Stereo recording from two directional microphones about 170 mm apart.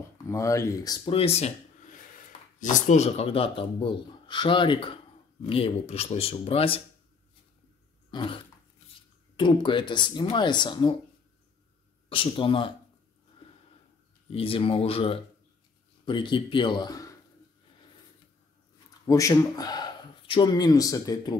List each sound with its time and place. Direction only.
0.3 s speech: 15° left (ahead or behind)
1.1 s speech: 35° left (ahead or behind)
8.1 s cough: 30° left (ahead or behind)
9.4 s speech: 30° left (ahead or behind)
12.1 s speech: 30° left (ahead or behind)
14.3 s speech: 35° left (ahead or behind)
19.0 s speech: 20° left (ahead or behind)